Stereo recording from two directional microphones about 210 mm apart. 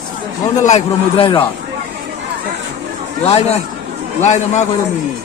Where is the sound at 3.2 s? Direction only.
30° left (ahead or behind).